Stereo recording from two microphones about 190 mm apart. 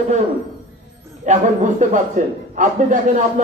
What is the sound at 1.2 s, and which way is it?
A man's voice, 40° right (ahead or behind).